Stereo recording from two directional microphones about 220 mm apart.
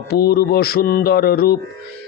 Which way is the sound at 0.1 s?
45° left (ahead or behind).